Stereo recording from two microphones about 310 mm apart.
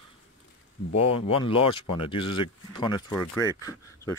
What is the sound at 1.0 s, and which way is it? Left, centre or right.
Speech, centre.